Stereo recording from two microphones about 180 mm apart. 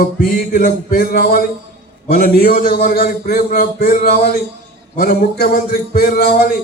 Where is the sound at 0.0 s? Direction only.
50° left (ahead or behind).